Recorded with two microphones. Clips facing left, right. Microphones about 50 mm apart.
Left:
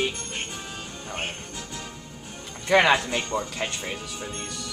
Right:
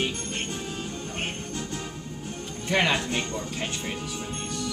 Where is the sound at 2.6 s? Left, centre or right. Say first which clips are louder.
Left 5 dB; left.